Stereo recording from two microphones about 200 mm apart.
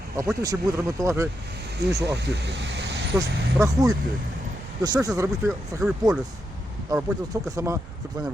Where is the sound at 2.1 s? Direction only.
60° right (ahead or behind).